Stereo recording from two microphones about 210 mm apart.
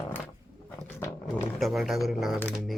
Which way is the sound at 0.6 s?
5° left (ahead or behind).